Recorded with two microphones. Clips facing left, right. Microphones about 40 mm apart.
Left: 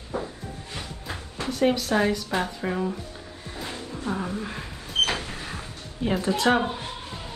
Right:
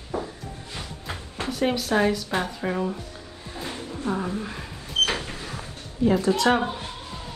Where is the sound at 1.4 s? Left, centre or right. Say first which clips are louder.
Left 2 dB; centre.